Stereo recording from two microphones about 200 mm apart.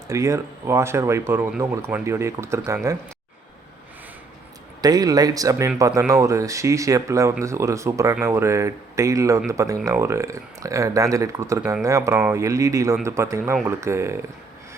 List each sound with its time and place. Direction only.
0.1 s speech: 15° right (ahead or behind)
4.8 s speech: 20° right (ahead or behind)